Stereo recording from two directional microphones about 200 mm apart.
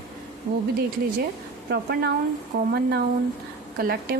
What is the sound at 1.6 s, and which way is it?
A woman's voice, 55° right (ahead or behind).